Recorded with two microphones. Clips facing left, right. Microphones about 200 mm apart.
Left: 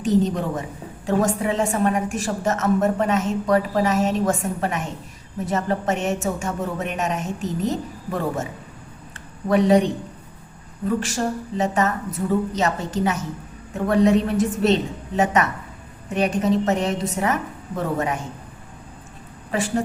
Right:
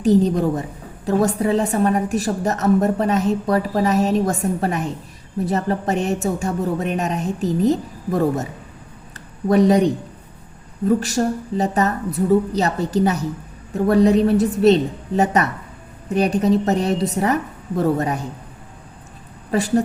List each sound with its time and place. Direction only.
0.0 s a woman's voice: 35° right (ahead or behind)
9.5 s a woman's voice: 40° right (ahead or behind)
19.5 s a woman's voice: 40° right (ahead or behind)